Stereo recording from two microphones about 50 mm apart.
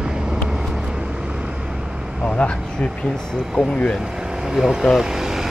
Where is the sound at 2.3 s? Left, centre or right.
Left.